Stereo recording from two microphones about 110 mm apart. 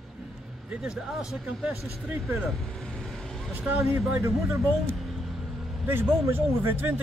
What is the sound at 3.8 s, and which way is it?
Speech, 20° right (ahead or behind).